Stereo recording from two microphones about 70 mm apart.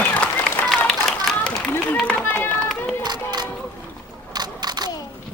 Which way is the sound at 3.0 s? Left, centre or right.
Right.